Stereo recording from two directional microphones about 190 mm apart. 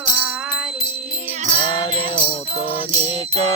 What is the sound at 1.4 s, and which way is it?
Music, 40° right (ahead or behind).